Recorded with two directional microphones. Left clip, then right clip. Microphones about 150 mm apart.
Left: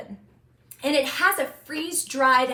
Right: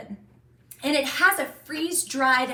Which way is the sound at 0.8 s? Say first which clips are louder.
Even; 30° left (ahead or behind).